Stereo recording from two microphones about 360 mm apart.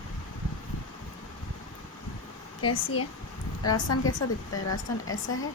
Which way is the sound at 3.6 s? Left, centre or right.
Left.